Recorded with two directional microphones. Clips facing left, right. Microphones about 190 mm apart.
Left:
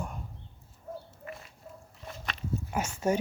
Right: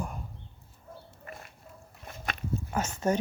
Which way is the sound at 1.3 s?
55° right (ahead or behind).